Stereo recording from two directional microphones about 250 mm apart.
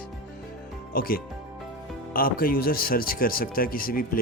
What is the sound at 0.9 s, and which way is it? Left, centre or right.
Speech, left.